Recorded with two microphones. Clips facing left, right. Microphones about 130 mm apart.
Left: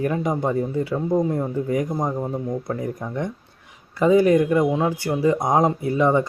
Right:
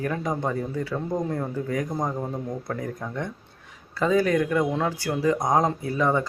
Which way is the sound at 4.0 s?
20° left (ahead or behind).